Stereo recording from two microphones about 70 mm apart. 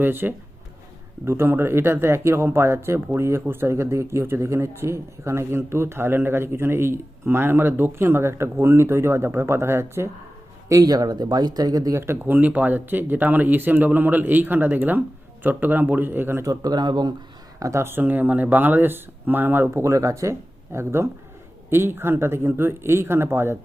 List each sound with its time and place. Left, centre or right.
0.0 s speech: right
10.7 s speech: right
11.9 s speech: right
16.4 s speech: right
17.6 s speech: right
19.8 s speech: right